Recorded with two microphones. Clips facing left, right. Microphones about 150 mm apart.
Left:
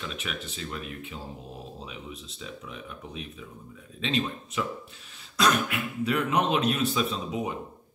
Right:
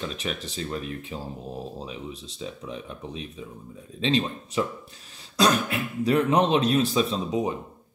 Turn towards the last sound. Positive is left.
turn(degrees=-35)  # may be behind; listen again after turning